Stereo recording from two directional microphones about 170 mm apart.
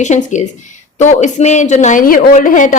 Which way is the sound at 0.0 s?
45° left (ahead or behind).